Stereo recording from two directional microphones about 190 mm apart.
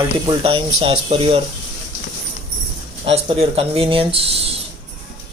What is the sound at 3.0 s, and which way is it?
Speech, 30° right (ahead or behind).